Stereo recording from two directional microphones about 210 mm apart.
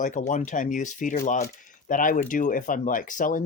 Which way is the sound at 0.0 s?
35° left (ahead or behind).